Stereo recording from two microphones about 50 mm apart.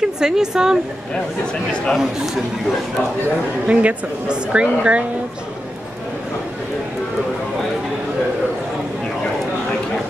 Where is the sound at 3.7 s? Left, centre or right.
Right.